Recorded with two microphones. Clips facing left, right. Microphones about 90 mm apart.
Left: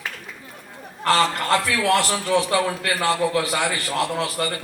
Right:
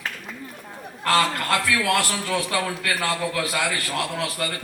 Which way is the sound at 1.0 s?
25° left (ahead or behind).